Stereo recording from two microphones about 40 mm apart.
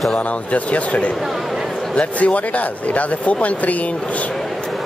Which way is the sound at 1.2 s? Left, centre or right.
Centre.